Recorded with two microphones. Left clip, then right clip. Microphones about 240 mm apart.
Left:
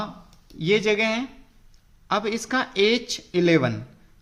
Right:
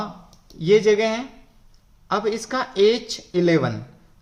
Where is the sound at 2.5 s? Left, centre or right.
Left.